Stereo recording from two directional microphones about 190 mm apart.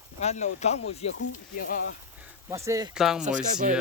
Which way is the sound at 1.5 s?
50° left (ahead or behind).